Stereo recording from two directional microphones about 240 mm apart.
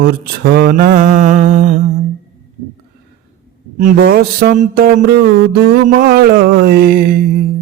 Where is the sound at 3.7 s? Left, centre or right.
Right.